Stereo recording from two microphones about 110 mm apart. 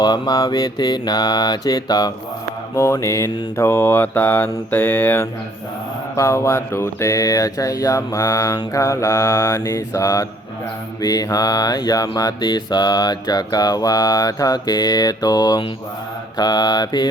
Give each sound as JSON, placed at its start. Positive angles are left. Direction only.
{"t": 0.0, "sound": "mantra", "side_deg": 35}
{"t": 2.7, "sound": "a sound", "side_deg": 25}
{"t": 11.0, "sound": "mantra", "side_deg": 35}